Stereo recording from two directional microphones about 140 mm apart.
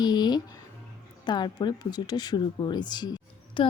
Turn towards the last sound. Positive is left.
turn(degrees=30)  # may be behind; listen again after turning